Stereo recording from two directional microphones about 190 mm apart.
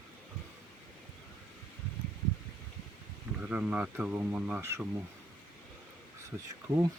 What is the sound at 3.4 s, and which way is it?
Speech, 5° right (ahead or behind).